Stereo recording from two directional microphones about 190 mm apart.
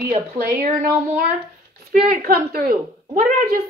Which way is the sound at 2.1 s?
50° right (ahead or behind).